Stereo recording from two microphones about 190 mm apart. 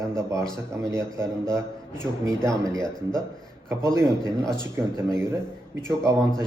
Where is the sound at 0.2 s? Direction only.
15° right (ahead or behind).